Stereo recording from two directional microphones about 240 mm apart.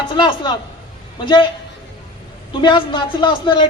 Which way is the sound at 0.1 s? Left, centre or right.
Centre.